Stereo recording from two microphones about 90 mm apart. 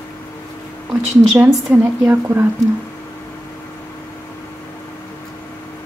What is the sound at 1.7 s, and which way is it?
Speech, 25° right (ahead or behind).